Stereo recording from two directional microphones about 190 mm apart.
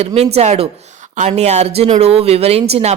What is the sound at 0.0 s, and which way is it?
A woman's voice, 30° right (ahead or behind).